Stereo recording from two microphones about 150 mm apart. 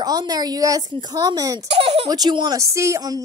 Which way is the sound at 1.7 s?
45° right (ahead or behind).